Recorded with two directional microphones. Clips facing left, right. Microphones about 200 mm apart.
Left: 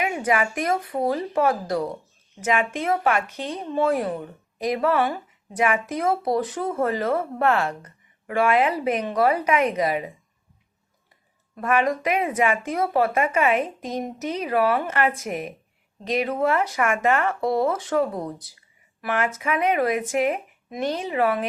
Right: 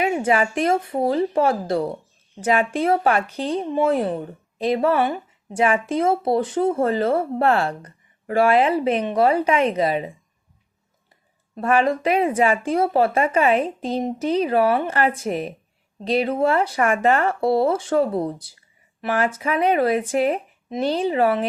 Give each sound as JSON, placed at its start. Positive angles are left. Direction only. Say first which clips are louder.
{"t": 0.0, "sound": "a woman's voice", "louder": "right 4 dB", "side_deg": -30}
{"t": 11.5, "sound": "speech", "louder": "right 3 dB", "side_deg": -30}